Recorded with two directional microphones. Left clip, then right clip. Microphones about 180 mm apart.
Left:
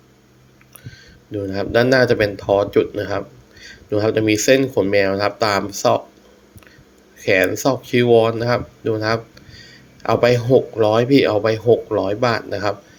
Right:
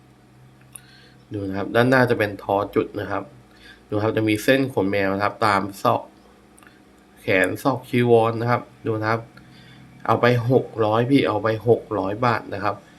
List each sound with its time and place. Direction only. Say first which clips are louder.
1.3 s speech: left 5 dB; 10° left (ahead or behind)
7.2 s speech: left 4 dB; 10° left (ahead or behind)